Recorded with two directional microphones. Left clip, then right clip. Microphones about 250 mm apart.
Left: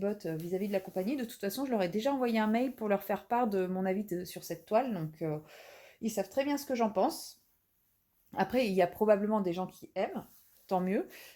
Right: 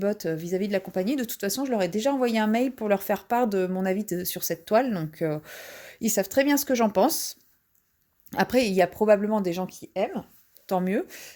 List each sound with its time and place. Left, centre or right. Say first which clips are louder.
0.0 s speech: right 8 dB; right